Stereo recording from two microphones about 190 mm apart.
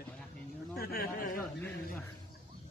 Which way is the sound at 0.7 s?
55° left (ahead or behind).